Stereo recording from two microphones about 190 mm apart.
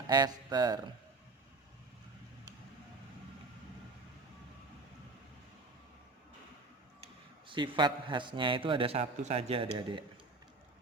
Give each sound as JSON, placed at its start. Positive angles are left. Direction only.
{"t": 0.1, "sound": "a man's voice", "side_deg": -20}
{"t": 7.4, "sound": "a man's voice", "side_deg": -25}